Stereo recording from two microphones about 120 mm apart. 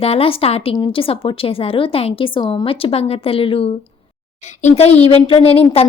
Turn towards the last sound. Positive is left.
turn(degrees=55)  # may be behind; listen again after turning